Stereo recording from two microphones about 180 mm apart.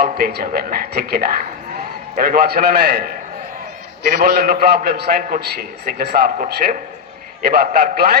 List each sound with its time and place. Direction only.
0.0 s a man's voice: 60° right (ahead or behind)
7.5 s a man's voice: 60° right (ahead or behind)